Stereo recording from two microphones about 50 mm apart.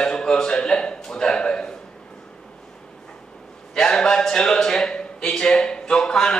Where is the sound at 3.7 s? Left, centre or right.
Centre.